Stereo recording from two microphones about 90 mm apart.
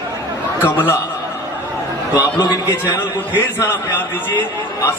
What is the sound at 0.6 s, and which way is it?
Speech, 20° left (ahead or behind).